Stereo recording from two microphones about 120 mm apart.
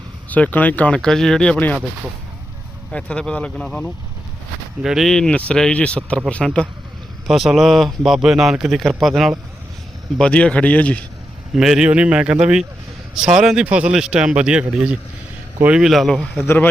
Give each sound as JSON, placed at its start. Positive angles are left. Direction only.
{"t": 0.3, "sound": "speech", "side_deg": 15}
{"t": 2.9, "sound": "a man's voice", "side_deg": 10}
{"t": 11.5, "sound": "a man's voice", "side_deg": -5}
{"t": 16.4, "sound": "a man's voice", "side_deg": 20}